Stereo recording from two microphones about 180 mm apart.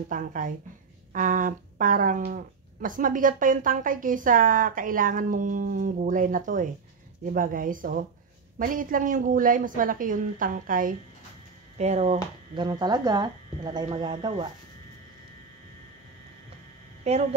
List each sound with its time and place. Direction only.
0.1 s speech: 50° right (ahead or behind)
11.8 s speech: 35° right (ahead or behind)
12.5 s speech: 25° right (ahead or behind)